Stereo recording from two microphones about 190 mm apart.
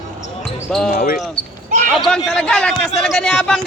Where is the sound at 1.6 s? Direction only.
45° right (ahead or behind).